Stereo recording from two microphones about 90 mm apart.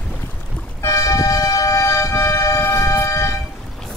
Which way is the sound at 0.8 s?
35° left (ahead or behind).